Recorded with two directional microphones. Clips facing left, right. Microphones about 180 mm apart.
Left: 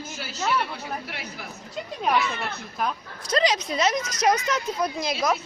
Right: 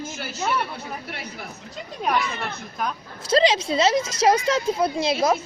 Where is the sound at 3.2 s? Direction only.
25° right (ahead or behind).